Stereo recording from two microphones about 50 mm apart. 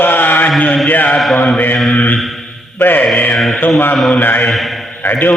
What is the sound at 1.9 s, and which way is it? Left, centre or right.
Mantra, left.